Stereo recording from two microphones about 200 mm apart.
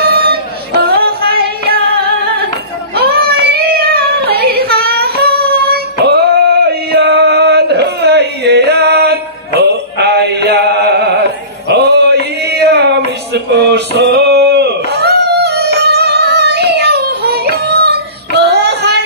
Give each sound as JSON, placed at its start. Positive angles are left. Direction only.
{"t": 0.2, "sound": "music", "side_deg": -50}
{"t": 3.0, "sound": "child singing", "side_deg": -50}
{"t": 11.7, "sound": "male singing", "side_deg": -55}
{"t": 13.3, "sound": "a sound", "side_deg": -60}
{"t": 18.5, "sound": "child singing", "side_deg": -55}